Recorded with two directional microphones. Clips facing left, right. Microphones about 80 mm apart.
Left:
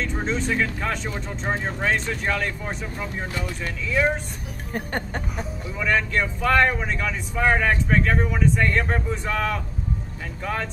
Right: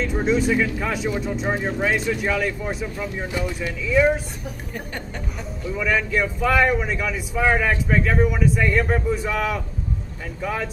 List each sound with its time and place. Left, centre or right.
0.0 s speech: centre
3.3 s speech: centre
3.6 s speech: centre
4.7 s music: left
5.7 s speech: centre